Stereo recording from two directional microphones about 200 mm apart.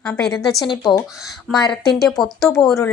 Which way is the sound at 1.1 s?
Centre (ahead or behind).